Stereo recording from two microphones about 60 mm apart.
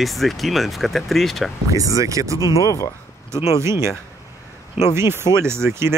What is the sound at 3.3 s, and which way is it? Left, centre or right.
Speech, right.